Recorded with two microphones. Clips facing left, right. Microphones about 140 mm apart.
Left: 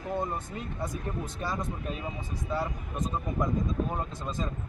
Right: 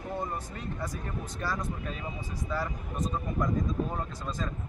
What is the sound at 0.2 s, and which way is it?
Speech, 20° left (ahead or behind).